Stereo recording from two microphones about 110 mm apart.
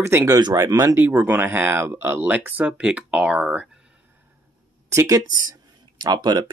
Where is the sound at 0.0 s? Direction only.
25° right (ahead or behind).